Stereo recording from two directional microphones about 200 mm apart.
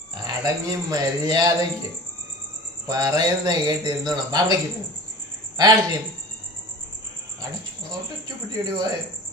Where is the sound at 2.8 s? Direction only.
20° right (ahead or behind).